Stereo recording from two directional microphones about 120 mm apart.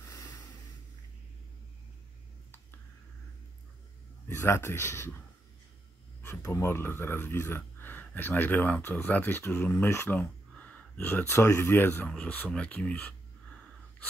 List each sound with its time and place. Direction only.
0.0 s a sound: 30° left (ahead or behind)
4.3 s speech: 20° left (ahead or behind)
6.2 s speech: 20° left (ahead or behind)